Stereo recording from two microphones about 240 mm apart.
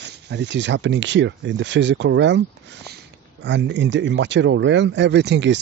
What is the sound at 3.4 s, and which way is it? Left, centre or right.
Speech, right.